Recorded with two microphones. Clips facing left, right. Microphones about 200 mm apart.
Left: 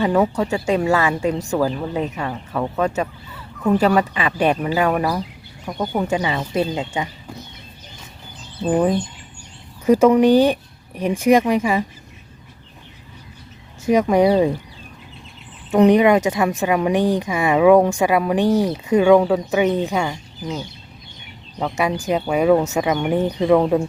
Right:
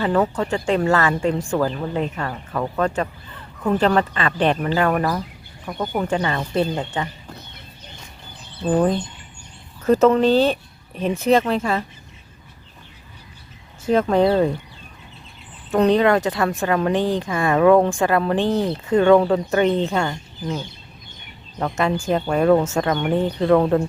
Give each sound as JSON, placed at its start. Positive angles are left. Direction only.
{"t": 0.0, "sound": "a woman's voice", "side_deg": 10}
{"t": 8.7, "sound": "a woman's voice", "side_deg": 10}
{"t": 13.8, "sound": "a woman's voice", "side_deg": 15}
{"t": 15.7, "sound": "a woman's voice", "side_deg": 15}
{"t": 21.6, "sound": "a woman's voice", "side_deg": 10}